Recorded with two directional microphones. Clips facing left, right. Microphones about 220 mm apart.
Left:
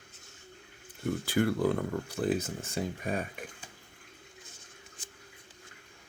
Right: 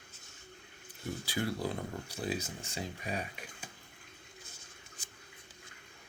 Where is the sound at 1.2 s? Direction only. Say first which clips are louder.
Left 8 dB; 55° left (ahead or behind).